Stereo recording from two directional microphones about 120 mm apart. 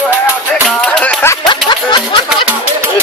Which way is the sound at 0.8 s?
5° left (ahead or behind).